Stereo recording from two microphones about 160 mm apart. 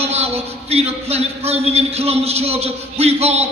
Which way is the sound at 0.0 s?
40° right (ahead or behind).